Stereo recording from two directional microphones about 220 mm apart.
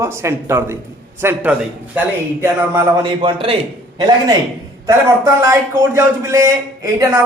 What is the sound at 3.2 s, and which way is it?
A man's voice, 25° right (ahead or behind).